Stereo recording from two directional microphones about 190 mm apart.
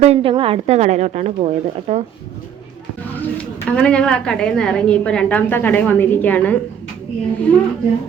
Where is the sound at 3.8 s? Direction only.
5° left (ahead or behind).